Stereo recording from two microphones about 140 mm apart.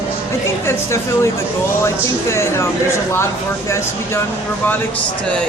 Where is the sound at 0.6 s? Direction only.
20° left (ahead or behind).